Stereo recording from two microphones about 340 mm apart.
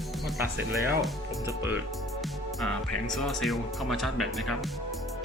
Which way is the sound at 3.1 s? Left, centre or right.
Centre.